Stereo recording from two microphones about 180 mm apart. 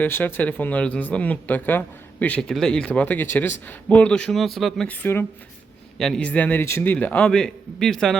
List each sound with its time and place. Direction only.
0.0 s speech: 10° left (ahead or behind)